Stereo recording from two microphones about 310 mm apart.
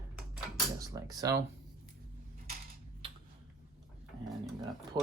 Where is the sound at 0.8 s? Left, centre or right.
Centre.